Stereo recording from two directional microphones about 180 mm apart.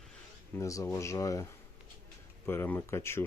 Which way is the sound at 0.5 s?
15° left (ahead or behind).